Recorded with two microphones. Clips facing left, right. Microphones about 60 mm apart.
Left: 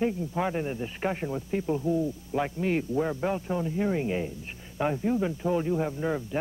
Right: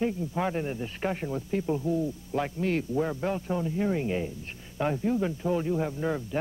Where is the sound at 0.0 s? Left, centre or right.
Centre.